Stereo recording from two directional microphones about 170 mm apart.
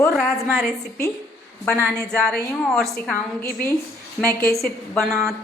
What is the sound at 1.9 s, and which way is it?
A woman's voice, 5° left (ahead or behind).